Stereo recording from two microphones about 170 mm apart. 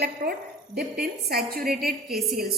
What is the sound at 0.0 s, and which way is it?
A woman's voice, 65° right (ahead or behind).